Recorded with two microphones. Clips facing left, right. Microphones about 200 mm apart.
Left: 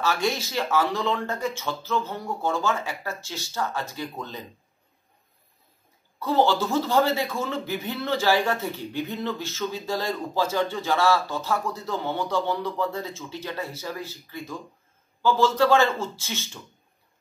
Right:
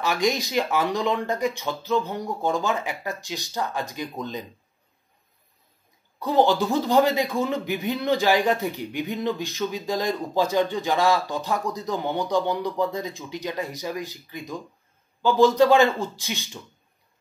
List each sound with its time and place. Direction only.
0.0 s a man's voice: 15° right (ahead or behind)
6.1 s a man's voice: 15° right (ahead or behind)